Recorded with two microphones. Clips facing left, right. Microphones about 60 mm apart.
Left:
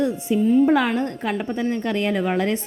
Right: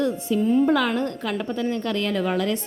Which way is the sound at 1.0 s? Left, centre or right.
Left.